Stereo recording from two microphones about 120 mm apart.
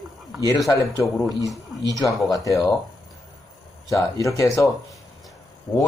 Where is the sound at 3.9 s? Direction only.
30° left (ahead or behind).